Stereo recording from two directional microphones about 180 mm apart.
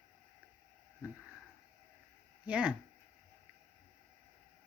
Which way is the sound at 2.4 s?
5° right (ahead or behind).